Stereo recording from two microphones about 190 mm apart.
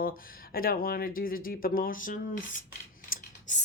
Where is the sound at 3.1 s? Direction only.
40° left (ahead or behind).